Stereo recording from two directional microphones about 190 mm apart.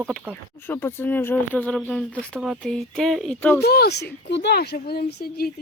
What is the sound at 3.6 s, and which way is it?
A woman's voice, 55° left (ahead or behind).